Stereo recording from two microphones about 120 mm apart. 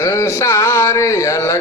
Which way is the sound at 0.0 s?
25° left (ahead or behind).